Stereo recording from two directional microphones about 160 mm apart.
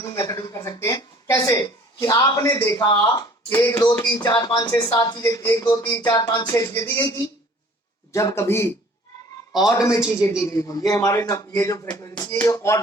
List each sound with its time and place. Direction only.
0.0 s a man's voice: 20° left (ahead or behind)
9.7 s a man's voice: 20° left (ahead or behind)